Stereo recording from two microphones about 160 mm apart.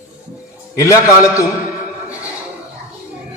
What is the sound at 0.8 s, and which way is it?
Speech, 20° left (ahead or behind).